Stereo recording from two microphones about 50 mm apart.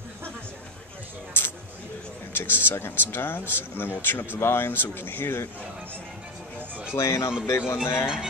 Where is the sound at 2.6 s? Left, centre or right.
Left.